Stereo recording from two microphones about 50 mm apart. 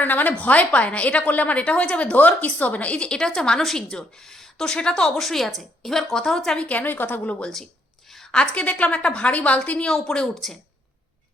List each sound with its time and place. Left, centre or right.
0.0 s a woman's voice: left
3.1 s speech: centre
6.6 s a woman's voice: left
9.7 s speech: centre